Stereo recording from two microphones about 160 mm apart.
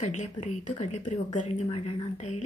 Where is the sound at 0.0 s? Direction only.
45° left (ahead or behind).